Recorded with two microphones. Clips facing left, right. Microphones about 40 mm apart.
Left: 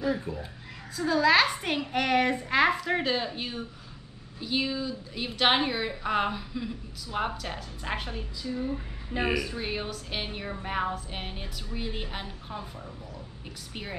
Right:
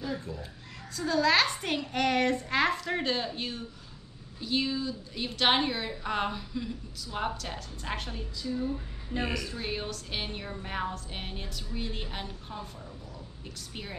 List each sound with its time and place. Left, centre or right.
0.0 s speech: left
0.9 s a woman's voice: centre